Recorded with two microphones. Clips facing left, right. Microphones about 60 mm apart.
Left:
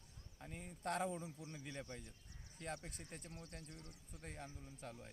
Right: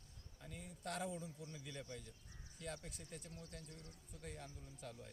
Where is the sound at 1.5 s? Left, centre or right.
Left.